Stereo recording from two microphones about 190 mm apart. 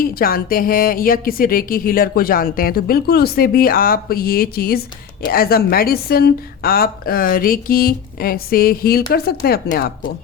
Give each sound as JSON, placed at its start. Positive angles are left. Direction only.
{"t": 0.0, "sound": "speech", "side_deg": 50}